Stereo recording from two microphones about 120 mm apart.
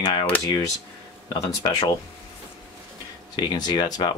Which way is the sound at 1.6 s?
30° left (ahead or behind).